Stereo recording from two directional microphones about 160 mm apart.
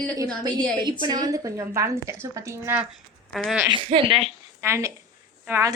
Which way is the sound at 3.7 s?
30° right (ahead or behind).